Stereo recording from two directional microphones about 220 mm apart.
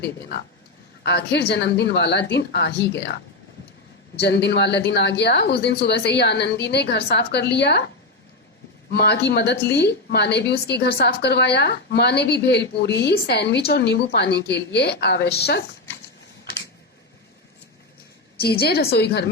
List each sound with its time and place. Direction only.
1.0 s a woman's voice: 50° left (ahead or behind)
4.2 s a woman's voice: 50° left (ahead or behind)
8.9 s a woman's voice: 50° left (ahead or behind)
18.3 s a woman's voice: 45° left (ahead or behind)